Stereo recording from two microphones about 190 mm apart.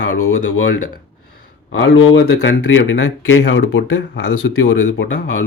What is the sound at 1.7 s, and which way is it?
Speech, 70° left (ahead or behind).